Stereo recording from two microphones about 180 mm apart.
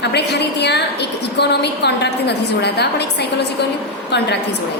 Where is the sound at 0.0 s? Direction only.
70° left (ahead or behind).